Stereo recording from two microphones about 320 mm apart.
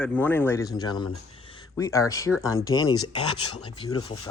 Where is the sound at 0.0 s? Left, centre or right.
Centre.